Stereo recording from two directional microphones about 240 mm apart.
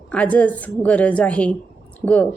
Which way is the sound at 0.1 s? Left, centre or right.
Centre.